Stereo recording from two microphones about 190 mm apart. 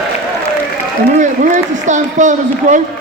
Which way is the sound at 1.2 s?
40° right (ahead or behind).